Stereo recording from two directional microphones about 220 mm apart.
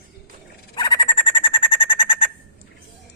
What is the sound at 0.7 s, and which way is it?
Bird, 20° left (ahead or behind).